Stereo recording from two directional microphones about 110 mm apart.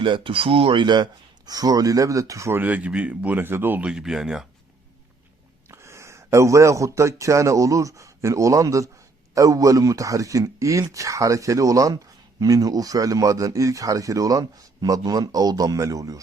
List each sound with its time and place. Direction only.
0.0 s speech: 50° right (ahead or behind); by 4.4 s 5° right (ahead or behind)
5.6 s speech: 25° right (ahead or behind)